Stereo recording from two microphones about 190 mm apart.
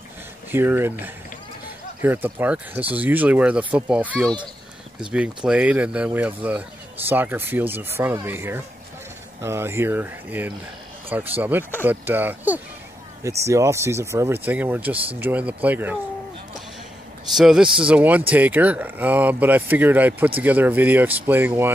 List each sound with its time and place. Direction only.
0.5 s speech: 10° right (ahead or behind)
17.3 s speech: centre (ahead or behind)